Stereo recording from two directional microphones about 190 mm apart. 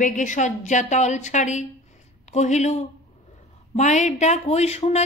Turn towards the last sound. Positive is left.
turn(degrees=35)  # may be behind; listen again after turning